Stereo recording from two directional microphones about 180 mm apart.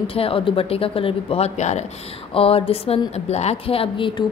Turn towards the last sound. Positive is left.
turn(degrees=30)  # may be behind; listen again after turning